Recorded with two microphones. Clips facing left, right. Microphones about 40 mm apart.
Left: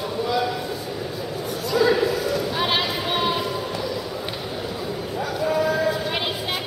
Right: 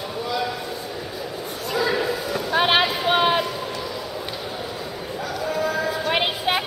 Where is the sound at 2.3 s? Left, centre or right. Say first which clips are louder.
Right 3 dB; right.